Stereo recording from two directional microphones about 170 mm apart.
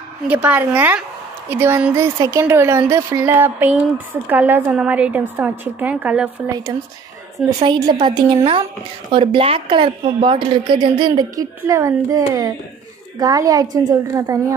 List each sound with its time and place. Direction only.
0.3 s speech: 10° right (ahead or behind)
7.5 s a woman's voice: 30° right (ahead or behind)